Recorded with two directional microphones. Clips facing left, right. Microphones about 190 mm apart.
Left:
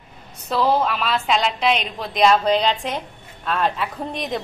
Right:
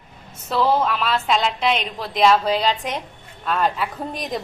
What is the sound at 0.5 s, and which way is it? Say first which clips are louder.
A woman's voice: even; 5° left (ahead or behind).